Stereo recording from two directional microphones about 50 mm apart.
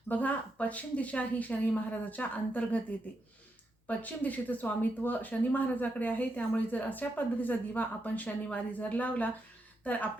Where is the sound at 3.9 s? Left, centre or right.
Left.